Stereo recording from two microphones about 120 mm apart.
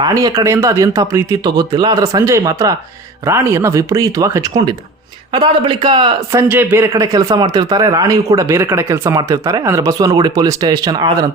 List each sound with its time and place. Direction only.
0.1 s speech: 30° right (ahead or behind)
5.3 s speech: 45° right (ahead or behind)
6.3 s speech: 15° right (ahead or behind)
6.9 s speech: 30° right (ahead or behind)